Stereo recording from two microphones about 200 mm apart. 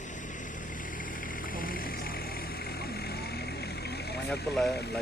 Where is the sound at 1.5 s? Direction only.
45° left (ahead or behind).